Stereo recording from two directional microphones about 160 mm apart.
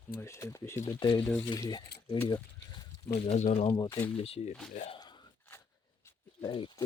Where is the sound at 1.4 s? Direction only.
25° left (ahead or behind).